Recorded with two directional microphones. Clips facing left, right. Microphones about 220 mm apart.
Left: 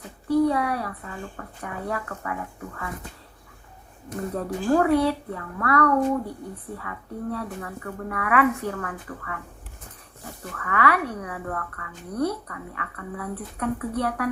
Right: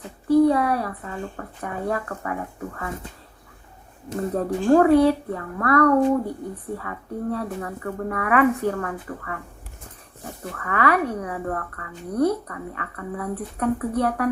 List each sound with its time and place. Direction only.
0.4 s a woman's voice: 35° right (ahead or behind)
4.1 s speech: 30° right (ahead or behind)
4.7 s a woman's voice: 45° right (ahead or behind)
10.6 s a woman's voice: 35° right (ahead or behind)